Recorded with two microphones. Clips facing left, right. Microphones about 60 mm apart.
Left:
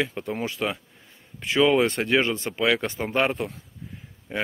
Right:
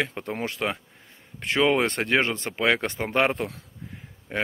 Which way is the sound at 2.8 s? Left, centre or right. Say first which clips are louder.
Right 1 dB; right.